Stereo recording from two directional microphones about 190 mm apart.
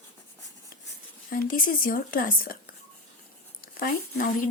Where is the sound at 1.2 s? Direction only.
50° left (ahead or behind).